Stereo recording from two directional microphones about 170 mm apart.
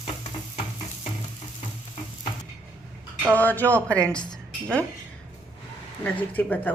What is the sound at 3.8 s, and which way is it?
Speech, 15° right (ahead or behind).